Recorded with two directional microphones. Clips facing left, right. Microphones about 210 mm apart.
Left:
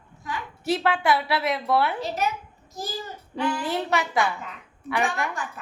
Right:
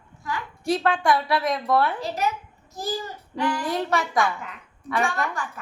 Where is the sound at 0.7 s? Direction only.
5° left (ahead or behind).